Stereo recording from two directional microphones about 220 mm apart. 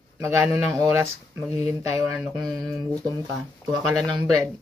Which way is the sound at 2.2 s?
Centre (ahead or behind).